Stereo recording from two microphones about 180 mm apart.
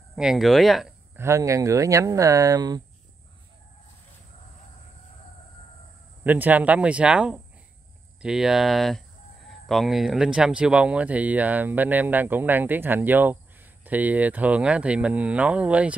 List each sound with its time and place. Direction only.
0.1 s speech: centre (ahead or behind)
1.1 s speech: 15° right (ahead or behind)
6.2 s speech: 10° right (ahead or behind)